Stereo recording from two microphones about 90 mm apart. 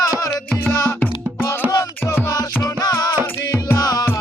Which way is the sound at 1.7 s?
35° left (ahead or behind).